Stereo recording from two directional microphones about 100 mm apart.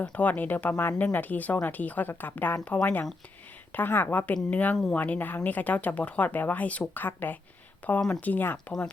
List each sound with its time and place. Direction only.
0.0 s a woman's voice: 15° left (ahead or behind)